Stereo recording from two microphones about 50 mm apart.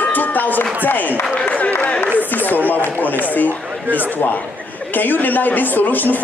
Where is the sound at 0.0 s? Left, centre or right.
Left.